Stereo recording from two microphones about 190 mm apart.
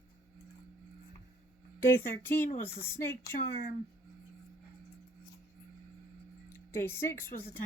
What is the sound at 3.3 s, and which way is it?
Speech, 50° left (ahead or behind).